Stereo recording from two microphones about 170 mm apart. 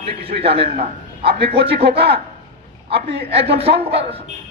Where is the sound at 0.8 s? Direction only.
75° right (ahead or behind).